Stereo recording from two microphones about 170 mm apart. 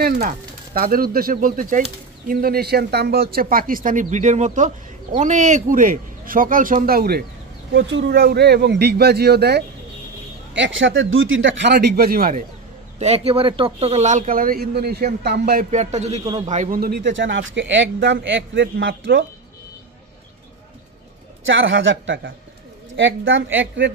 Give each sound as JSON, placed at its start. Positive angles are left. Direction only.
{"t": 0.7, "sound": "speech", "side_deg": -60}
{"t": 7.7, "sound": "speech", "side_deg": -90}
{"t": 10.5, "sound": "speech", "side_deg": -90}
{"t": 13.0, "sound": "speech", "side_deg": -40}
{"t": 15.7, "sound": "a man's voice", "side_deg": -40}
{"t": 16.8, "sound": "speech", "side_deg": -80}
{"t": 21.5, "sound": "speech", "side_deg": -90}